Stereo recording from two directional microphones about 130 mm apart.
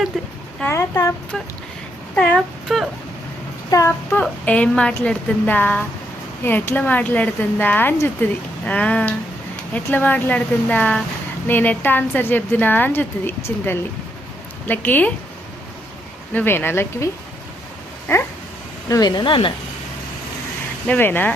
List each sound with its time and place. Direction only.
0.1 s speech: 5° left (ahead or behind)
0.6 s speech: 20° left (ahead or behind)
2.1 s speech: 5° left (ahead or behind)
3.7 s a sound: 25° left (ahead or behind)
4.1 s speech: 10° left (ahead or behind)
16.3 s speech: 15° left (ahead or behind)
18.9 s speech: 30° left (ahead or behind)
20.8 s speech: 15° left (ahead or behind)